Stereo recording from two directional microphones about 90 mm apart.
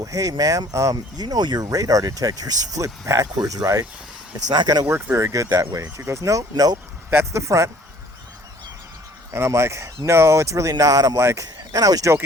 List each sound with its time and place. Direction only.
0.0 s speech: 40° right (ahead or behind)
1.1 s speech: 50° right (ahead or behind)
4.5 s speech: 50° right (ahead or behind)
4.9 s speech: 30° right (ahead or behind)
7.1 s speech: 25° right (ahead or behind)
7.4 s speech: 35° right (ahead or behind)
9.3 s speech: 30° right (ahead or behind)